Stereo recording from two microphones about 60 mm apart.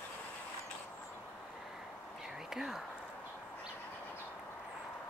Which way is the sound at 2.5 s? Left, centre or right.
Centre.